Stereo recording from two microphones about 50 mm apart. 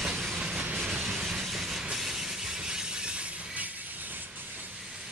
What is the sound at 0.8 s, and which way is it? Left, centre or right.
Train, centre.